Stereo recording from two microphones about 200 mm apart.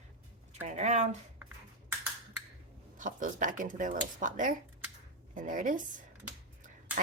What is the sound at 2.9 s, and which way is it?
A woman's voice, 40° right (ahead or behind).